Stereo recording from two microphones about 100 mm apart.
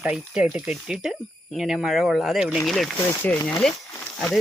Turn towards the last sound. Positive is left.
turn(degrees=10)  # may be behind; listen again after turning